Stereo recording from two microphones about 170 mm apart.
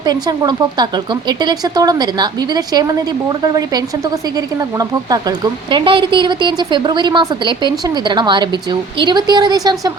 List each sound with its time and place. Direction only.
0.0 s speech: 25° right (ahead or behind)